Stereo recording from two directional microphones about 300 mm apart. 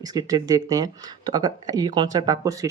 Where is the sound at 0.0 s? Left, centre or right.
Centre.